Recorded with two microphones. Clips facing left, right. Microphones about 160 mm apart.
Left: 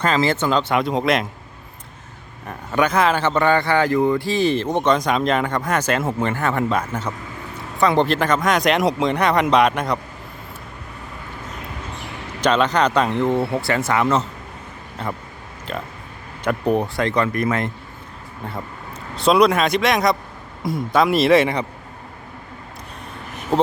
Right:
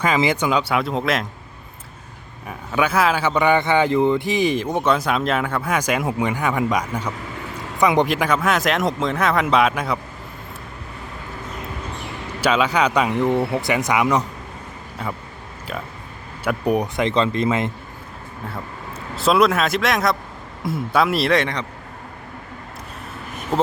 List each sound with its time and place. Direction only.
0.0 s speech: 15° right (ahead or behind)
2.5 s speech: 5° right (ahead or behind)
12.4 s speech: 10° right (ahead or behind)
15.7 s speech: 5° right (ahead or behind); by 17.7 s 20° right (ahead or behind)
19.1 s speech: centre (ahead or behind)